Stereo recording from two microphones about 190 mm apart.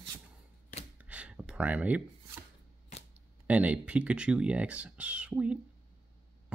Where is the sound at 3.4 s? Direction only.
5° right (ahead or behind).